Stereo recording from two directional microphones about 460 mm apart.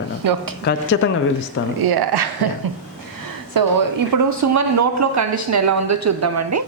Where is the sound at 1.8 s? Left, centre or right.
Right.